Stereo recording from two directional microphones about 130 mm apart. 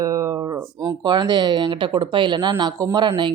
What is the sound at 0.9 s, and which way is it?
Speech, 35° right (ahead or behind).